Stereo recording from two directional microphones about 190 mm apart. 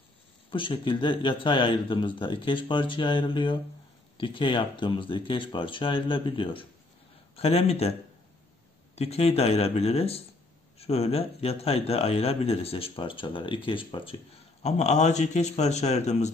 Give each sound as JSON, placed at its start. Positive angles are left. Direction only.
{"t": 0.5, "sound": "speech", "side_deg": 25}
{"t": 8.9, "sound": "speech", "side_deg": 35}